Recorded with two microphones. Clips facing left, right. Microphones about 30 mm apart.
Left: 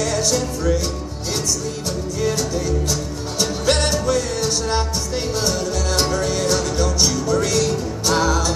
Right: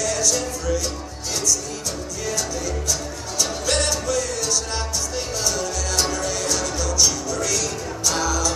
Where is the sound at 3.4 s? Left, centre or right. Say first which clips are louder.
Left 3 dB; left.